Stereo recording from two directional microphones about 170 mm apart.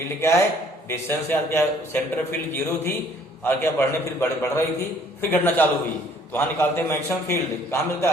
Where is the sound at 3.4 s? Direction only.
15° left (ahead or behind).